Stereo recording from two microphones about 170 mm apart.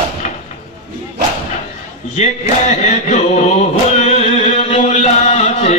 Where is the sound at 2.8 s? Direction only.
40° left (ahead or behind).